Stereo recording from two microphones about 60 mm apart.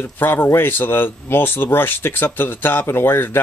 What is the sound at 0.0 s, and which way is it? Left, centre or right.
Speech, left.